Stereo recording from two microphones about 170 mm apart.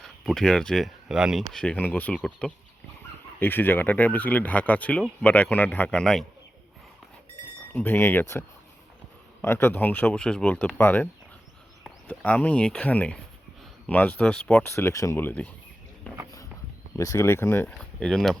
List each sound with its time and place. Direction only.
0.0 s speech: 5° left (ahead or behind)
7.7 s speech: 10° left (ahead or behind)
17.0 s speech: 20° left (ahead or behind); by 18.3 s 5° left (ahead or behind)